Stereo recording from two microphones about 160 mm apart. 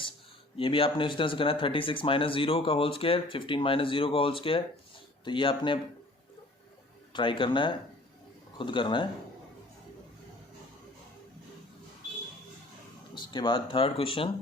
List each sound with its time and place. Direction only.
0.5 s speech: 35° left (ahead or behind)
7.1 s speech: 30° left (ahead or behind)
13.3 s speech: 30° left (ahead or behind)